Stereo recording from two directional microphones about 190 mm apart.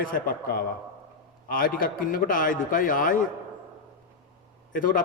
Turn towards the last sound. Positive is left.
turn(degrees=45)  # may be behind; listen again after turning